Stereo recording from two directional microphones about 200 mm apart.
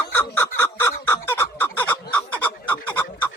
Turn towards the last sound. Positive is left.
turn(degrees=10)  # may be behind; listen again after turning